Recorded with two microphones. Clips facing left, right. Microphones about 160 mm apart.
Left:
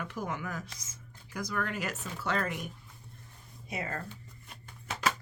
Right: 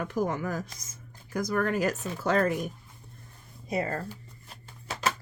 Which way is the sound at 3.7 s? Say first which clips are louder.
Right 7 dB; 35° right (ahead or behind).